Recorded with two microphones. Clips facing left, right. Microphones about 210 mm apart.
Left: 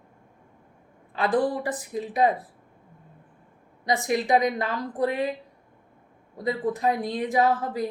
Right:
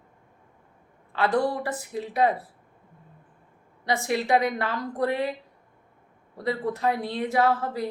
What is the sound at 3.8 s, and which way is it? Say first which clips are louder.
Speech: left 1 dB; 15° left (ahead or behind).